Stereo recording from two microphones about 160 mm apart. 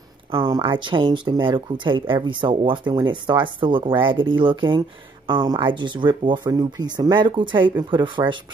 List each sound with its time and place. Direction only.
0.3 s speech: 30° right (ahead or behind)